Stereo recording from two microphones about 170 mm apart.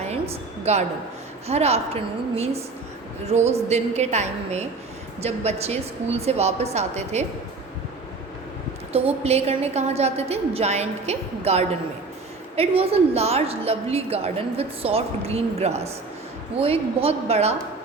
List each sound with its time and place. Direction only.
0.1 s a sound: 40° right (ahead or behind)
1.5 s a woman's voice: 40° right (ahead or behind)
8.9 s a woman's voice: 35° right (ahead or behind)